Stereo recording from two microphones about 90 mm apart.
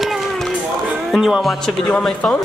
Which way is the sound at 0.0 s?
Centre (ahead or behind).